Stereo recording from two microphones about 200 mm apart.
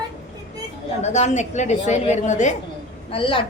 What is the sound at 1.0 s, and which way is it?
A woman's voice, 35° left (ahead or behind).